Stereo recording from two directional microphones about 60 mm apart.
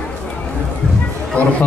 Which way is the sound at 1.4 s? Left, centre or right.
Left.